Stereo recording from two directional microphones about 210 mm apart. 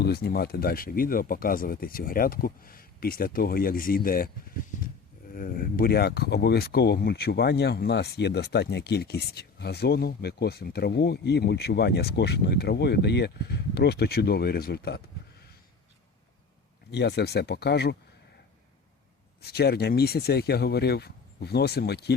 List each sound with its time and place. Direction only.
0.0 s speech: 50° left (ahead or behind)
5.3 s speech: 40° left (ahead or behind)
16.9 s speech: 55° left (ahead or behind)
19.4 s speech: 50° left (ahead or behind)